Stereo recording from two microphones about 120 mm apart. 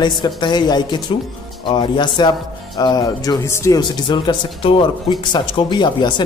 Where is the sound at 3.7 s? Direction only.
35° left (ahead or behind).